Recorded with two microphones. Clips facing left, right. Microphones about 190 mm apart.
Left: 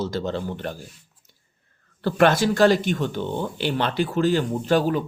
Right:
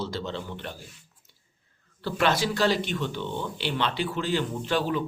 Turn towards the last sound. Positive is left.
turn(degrees=45)  # may be behind; listen again after turning